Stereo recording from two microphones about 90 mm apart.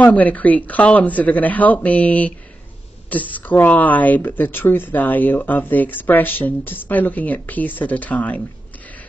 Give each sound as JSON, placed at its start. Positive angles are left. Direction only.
{"t": 0.0, "sound": "speech", "side_deg": 15}